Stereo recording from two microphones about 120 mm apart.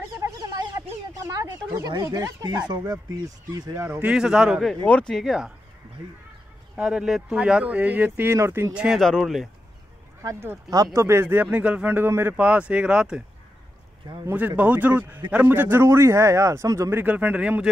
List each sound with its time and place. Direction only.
0.2 s a sound: 30° right (ahead or behind)
2.0 s speech: 30° right (ahead or behind)
3.5 s speech: 35° right (ahead or behind)
3.8 s a man's voice: 20° right (ahead or behind)
4.1 s a man's voice: 5° right (ahead or behind)
4.8 s a man's voice: 10° left (ahead or behind)
6.8 s speech: 5° right (ahead or behind); by 8.7 s 25° right (ahead or behind)
8.7 s a man's voice: 5° right (ahead or behind)
10.7 s a man's voice: 30° right (ahead or behind); by 13.2 s 10° right (ahead or behind)
14.6 s a man's voice: 15° right (ahead or behind); by 17.0 s 30° right (ahead or behind)
17.0 s speech: 15° right (ahead or behind)